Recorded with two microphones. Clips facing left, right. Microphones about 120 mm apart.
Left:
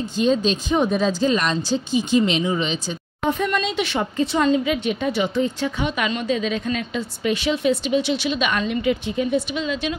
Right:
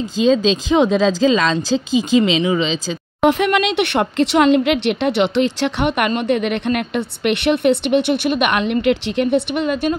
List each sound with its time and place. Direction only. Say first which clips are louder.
0.2 s speech: right 5 dB; 90° right; by 9.9 s 50° right (ahead or behind)